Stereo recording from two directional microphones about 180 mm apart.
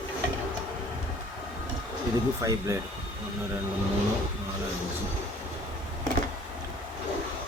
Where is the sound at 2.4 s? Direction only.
15° right (ahead or behind).